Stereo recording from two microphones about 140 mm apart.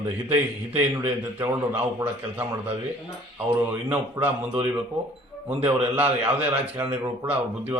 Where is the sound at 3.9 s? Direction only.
15° right (ahead or behind).